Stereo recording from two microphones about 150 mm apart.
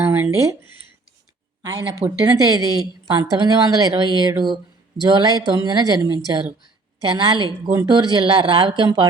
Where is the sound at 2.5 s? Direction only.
25° right (ahead or behind).